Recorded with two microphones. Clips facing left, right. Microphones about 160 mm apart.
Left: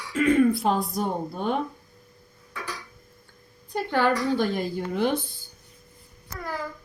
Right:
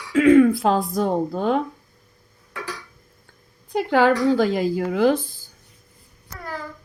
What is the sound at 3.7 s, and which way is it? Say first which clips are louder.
A woman's voice: right 6 dB; 90° right.